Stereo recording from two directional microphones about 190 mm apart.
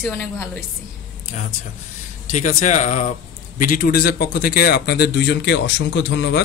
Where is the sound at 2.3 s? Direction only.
40° left (ahead or behind).